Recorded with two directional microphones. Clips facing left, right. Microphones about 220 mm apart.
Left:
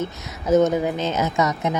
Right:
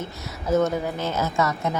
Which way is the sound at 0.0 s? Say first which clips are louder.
Left 4 dB; 20° left (ahead or behind).